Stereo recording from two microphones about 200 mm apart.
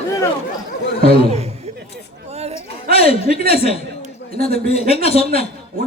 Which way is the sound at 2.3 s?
30° right (ahead or behind).